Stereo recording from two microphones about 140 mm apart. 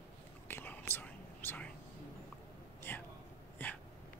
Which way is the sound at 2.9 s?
15° left (ahead or behind).